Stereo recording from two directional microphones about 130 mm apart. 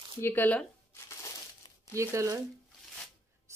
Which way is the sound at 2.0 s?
25° right (ahead or behind).